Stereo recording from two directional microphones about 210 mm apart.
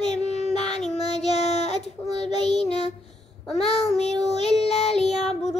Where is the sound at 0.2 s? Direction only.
30° left (ahead or behind).